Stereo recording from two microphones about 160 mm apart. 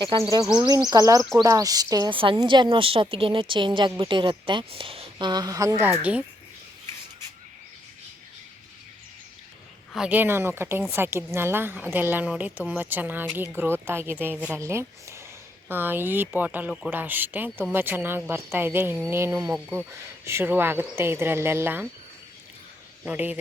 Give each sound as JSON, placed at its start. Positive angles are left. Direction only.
{"t": 0.0, "sound": "a woman's voice", "side_deg": -30}
{"t": 6.0, "sound": "a woman's voice", "side_deg": -10}
{"t": 9.9, "sound": "a woman's voice", "side_deg": -5}
{"t": 23.0, "sound": "a woman's voice", "side_deg": -10}